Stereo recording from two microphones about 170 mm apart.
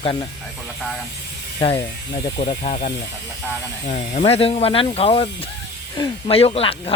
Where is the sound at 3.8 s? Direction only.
40° left (ahead or behind).